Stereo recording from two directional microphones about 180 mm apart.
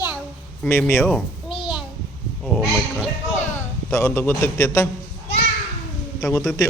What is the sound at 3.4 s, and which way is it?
A man's voice, 15° left (ahead or behind).